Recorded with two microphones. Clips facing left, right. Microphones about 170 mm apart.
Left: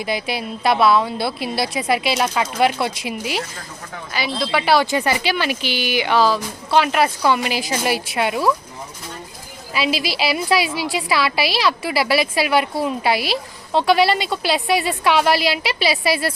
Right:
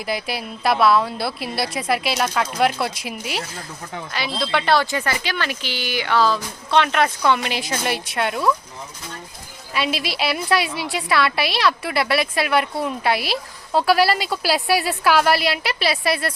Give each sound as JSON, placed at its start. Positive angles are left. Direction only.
{"t": 0.0, "sound": "a woman's voice", "side_deg": 0}
{"t": 4.8, "sound": "speech", "side_deg": 15}
{"t": 6.4, "sound": "a woman's voice", "side_deg": 5}
{"t": 9.7, "sound": "a woman's voice", "side_deg": 0}